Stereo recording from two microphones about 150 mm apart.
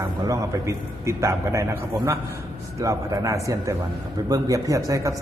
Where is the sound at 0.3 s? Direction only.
20° right (ahead or behind).